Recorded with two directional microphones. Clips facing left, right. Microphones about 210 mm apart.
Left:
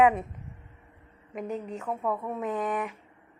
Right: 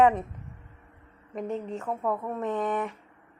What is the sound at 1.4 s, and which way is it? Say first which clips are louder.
A woman's voice: right 2 dB; centre (ahead or behind).